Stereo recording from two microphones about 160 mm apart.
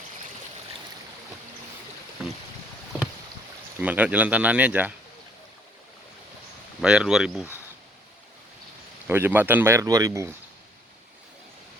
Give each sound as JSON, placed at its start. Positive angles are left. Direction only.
{"t": 3.8, "sound": "speech", "side_deg": -10}
{"t": 6.8, "sound": "speech", "side_deg": -5}
{"t": 9.0, "sound": "speech", "side_deg": -15}